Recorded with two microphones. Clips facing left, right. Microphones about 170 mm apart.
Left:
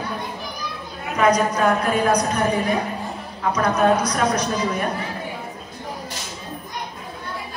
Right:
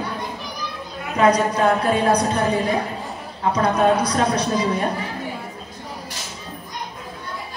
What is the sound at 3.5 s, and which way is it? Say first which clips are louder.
Speech: right 1 dB; 30° right (ahead or behind).